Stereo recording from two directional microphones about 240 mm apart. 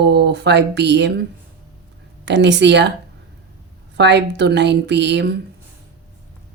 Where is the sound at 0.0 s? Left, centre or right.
Right.